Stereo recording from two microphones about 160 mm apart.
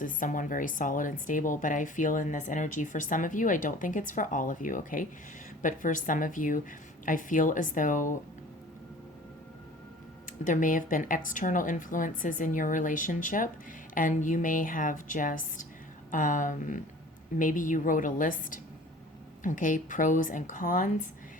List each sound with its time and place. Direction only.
0.0 s speech: 55° left (ahead or behind)
10.4 s speech: 55° left (ahead or behind)